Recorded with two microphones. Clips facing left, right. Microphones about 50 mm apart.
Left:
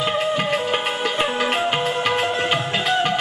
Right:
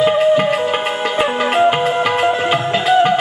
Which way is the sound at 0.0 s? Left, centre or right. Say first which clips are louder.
Right 9 dB; centre.